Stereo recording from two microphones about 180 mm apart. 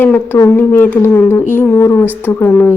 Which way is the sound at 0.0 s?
10° left (ahead or behind).